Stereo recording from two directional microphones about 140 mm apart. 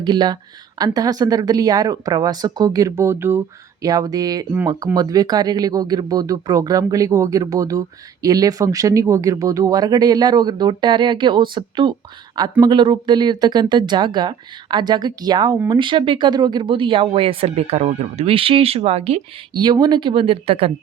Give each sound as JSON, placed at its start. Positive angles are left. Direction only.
{"t": 0.0, "sound": "speech", "side_deg": -30}
{"t": 19.5, "sound": "speech", "side_deg": -30}